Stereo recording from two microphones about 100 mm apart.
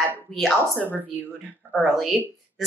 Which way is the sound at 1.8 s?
Centre (ahead or behind).